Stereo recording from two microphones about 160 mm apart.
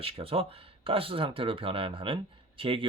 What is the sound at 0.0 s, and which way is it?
Speech, 35° right (ahead or behind).